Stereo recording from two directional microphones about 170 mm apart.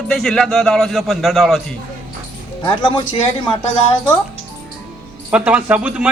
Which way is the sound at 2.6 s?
30° left (ahead or behind).